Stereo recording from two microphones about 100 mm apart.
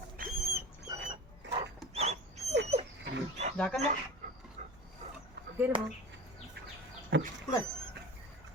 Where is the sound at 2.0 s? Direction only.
90° right.